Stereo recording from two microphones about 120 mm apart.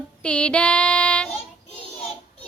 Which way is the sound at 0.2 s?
10° left (ahead or behind).